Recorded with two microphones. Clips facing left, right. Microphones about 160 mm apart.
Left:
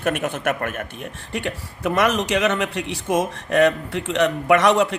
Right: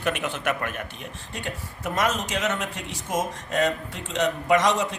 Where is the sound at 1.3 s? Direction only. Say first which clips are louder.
Left 7 dB; 70° left (ahead or behind).